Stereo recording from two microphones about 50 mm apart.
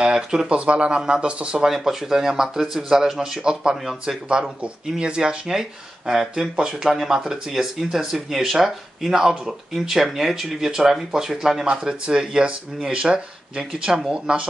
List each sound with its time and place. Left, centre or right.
0.0 s speech: centre
1.7 s speech: centre
11.6 s speech: centre